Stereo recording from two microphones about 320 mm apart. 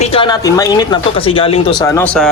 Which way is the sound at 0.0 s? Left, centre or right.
Centre.